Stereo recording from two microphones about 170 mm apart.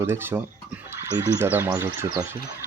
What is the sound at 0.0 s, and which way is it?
Speech, 15° right (ahead or behind).